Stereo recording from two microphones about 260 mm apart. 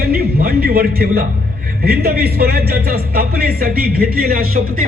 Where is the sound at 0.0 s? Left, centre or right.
Right.